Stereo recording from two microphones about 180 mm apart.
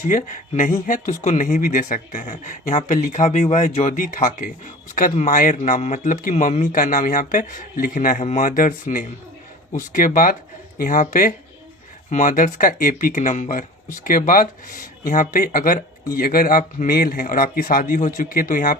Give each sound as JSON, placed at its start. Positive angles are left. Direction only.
{"t": 0.0, "sound": "speech", "side_deg": 45}
{"t": 10.8, "sound": "speech", "side_deg": 50}